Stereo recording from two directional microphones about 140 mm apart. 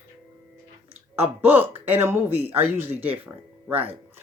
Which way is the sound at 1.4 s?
15° right (ahead or behind).